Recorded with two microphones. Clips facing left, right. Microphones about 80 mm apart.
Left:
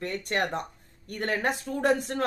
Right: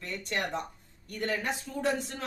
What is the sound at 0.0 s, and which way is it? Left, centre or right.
Speech, left.